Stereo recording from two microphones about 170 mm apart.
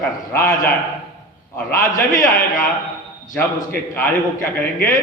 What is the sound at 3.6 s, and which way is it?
Speech, 15° left (ahead or behind).